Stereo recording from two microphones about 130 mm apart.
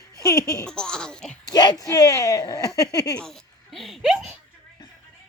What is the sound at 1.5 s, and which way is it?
Speech, 35° left (ahead or behind).